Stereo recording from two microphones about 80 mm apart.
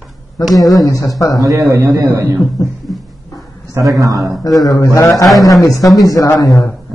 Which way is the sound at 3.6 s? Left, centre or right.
Right.